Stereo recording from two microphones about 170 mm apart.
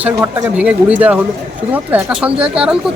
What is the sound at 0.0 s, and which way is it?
Speech, 10° right (ahead or behind).